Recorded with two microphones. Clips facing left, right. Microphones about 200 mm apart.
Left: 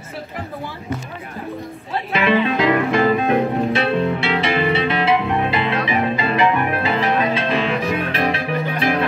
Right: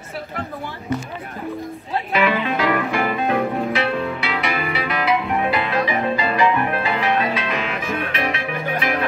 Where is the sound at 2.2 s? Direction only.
25° left (ahead or behind).